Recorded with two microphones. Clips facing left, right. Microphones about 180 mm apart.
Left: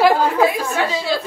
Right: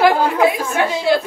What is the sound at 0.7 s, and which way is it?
Speech, 15° right (ahead or behind).